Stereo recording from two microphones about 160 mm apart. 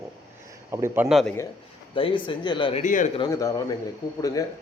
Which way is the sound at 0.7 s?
15° right (ahead or behind).